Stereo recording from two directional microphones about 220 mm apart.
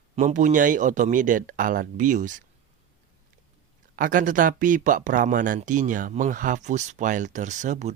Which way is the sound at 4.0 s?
40° right (ahead or behind).